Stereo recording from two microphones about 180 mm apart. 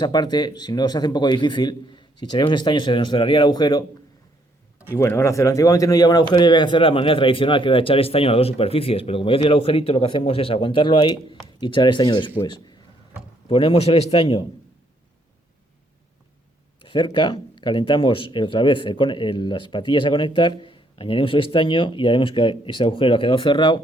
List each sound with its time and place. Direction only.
0.0 s speech: 25° left (ahead or behind)
4.9 s a man's voice: 15° left (ahead or behind); by 14.4 s 30° left (ahead or behind)
16.8 s speech: 25° left (ahead or behind)